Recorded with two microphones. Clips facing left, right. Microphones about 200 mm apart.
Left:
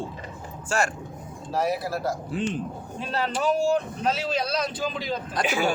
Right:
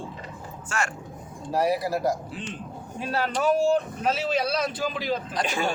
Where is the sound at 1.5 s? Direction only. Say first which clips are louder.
Right 2 dB; 10° right (ahead or behind).